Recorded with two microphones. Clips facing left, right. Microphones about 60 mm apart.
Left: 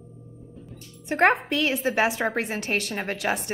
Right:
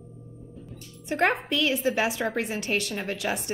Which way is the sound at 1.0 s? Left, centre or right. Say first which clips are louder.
Left 4 dB; left.